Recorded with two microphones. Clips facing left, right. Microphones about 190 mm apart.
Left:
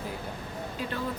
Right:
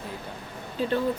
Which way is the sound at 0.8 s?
30° right (ahead or behind).